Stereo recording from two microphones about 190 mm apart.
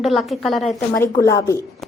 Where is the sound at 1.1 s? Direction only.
20° left (ahead or behind).